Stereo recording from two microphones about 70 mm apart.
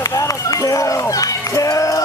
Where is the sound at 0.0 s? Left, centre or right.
Left.